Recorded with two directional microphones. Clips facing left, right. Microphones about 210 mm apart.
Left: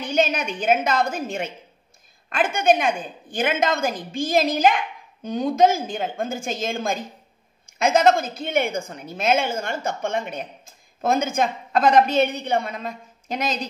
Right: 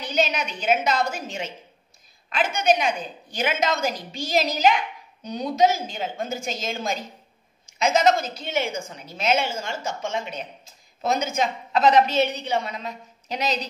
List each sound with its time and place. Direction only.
0.0 s a woman's voice: 50° left (ahead or behind)